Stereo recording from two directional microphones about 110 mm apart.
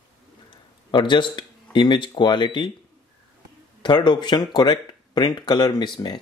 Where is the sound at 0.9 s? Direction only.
45° left (ahead or behind).